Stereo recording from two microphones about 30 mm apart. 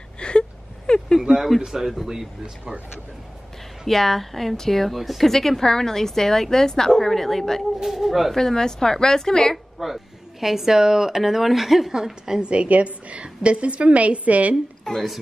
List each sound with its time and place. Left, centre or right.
0.2 s whimper: left
1.7 s a woman's voice: centre
3.8 s a woman's voice: centre
5.3 s a woman's voice: centre
7.8 s a woman's voice: centre
8.4 s a woman's voice: centre
9.8 s a woman's voice: centre
11.9 s a woman's voice: right
12.4 s a woman's voice: right
12.6 s a woman's voice: right
14.9 s a woman's voice: left